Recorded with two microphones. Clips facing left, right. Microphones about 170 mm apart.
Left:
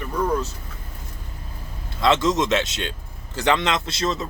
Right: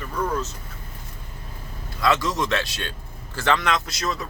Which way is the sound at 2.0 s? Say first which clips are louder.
Left 3 dB; 25° left (ahead or behind).